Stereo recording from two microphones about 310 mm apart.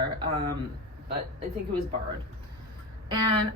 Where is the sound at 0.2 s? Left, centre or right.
Centre.